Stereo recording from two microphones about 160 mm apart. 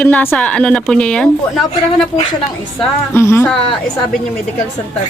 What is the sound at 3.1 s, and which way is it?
Speech, 15° left (ahead or behind).